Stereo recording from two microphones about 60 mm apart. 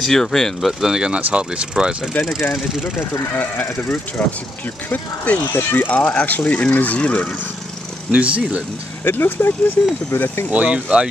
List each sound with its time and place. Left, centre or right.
0.0 s speech: centre
2.2 s speech: left
8.1 s speech: centre
9.0 s speech: left
10.5 s speech: right